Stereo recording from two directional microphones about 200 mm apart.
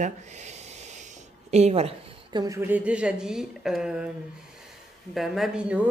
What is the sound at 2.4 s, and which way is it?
A woman's voice, 10° right (ahead or behind).